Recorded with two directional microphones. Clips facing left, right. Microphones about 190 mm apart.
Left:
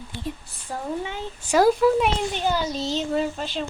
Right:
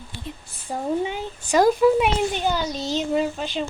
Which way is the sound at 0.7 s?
15° right (ahead or behind).